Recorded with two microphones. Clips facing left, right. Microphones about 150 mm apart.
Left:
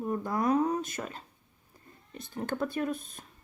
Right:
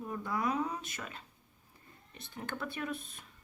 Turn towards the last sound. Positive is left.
turn(degrees=40)  # may be behind; listen again after turning